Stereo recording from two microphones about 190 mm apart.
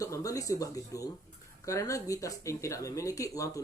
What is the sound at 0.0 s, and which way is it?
Speech, 15° left (ahead or behind).